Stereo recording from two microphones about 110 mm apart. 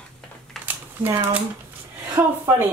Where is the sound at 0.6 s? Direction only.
15° right (ahead or behind).